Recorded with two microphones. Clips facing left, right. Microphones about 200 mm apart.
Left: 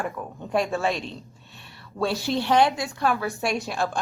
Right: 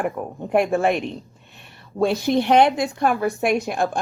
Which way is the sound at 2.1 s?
20° right (ahead or behind).